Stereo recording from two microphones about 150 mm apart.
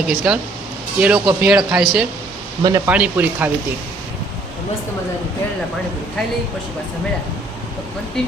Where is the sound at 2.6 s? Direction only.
20° right (ahead or behind).